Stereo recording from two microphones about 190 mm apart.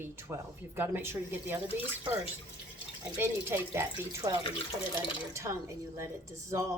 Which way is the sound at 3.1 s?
15° right (ahead or behind).